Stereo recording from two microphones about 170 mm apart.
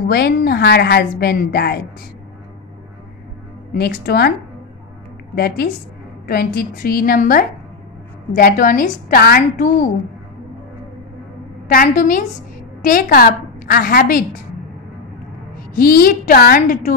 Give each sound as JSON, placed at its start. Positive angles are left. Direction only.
{"t": 0.0, "sound": "a woman's voice", "side_deg": 65}
{"t": 3.7, "sound": "a woman's voice", "side_deg": 65}
{"t": 5.3, "sound": "a woman's voice", "side_deg": 70}
{"t": 11.6, "sound": "a woman's voice", "side_deg": 55}
{"t": 15.7, "sound": "a woman's voice", "side_deg": 60}